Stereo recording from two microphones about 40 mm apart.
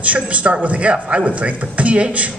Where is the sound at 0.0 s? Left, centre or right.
Right.